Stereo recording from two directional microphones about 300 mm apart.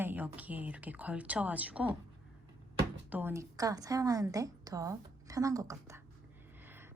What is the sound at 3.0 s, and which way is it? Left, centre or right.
A woman's voice, centre.